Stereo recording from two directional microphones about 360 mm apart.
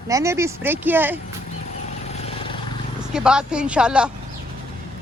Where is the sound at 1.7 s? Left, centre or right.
Centre.